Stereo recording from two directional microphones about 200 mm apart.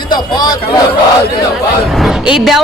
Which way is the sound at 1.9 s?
Centre (ahead or behind).